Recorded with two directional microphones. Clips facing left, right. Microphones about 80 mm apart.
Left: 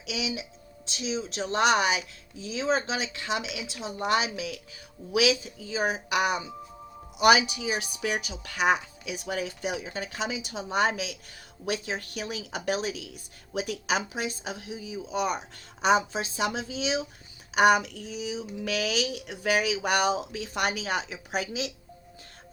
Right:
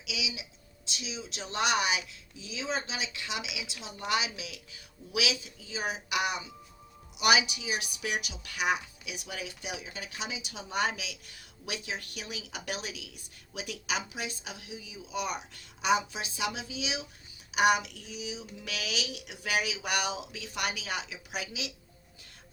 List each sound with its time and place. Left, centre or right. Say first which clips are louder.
0.0 s a woman's voice: left 6 dB; left